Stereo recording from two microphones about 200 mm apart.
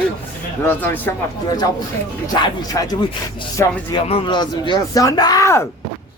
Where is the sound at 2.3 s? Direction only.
20° left (ahead or behind).